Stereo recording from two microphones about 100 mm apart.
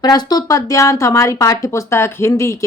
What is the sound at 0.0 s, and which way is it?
Speech, 40° left (ahead or behind).